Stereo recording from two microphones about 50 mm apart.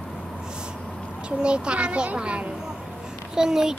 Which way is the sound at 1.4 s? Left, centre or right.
Right.